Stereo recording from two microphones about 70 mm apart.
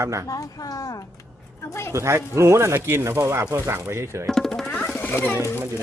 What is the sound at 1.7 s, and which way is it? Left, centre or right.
Speech, left.